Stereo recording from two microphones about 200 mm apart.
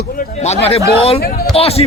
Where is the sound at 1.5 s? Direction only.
30° left (ahead or behind).